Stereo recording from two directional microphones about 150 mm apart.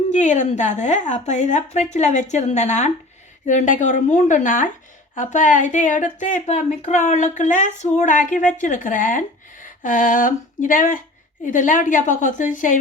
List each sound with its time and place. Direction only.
0.1 s a woman's voice: 55° left (ahead or behind)